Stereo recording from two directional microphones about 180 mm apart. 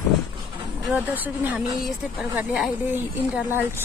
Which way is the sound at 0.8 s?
10° right (ahead or behind).